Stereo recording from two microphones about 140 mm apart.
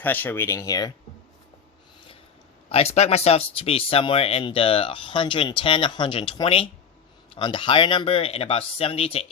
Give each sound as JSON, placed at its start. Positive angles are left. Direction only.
{"t": 0.0, "sound": "speech", "side_deg": 15}
{"t": 2.6, "sound": "speech", "side_deg": 45}